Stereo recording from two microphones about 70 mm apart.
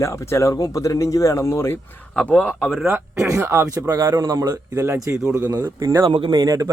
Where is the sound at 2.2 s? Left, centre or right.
Left.